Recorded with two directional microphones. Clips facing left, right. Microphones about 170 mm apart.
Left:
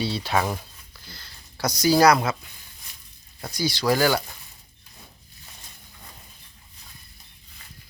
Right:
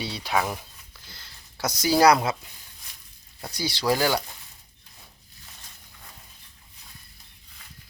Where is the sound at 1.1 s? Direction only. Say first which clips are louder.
Left 2 dB; 25° right (ahead or behind).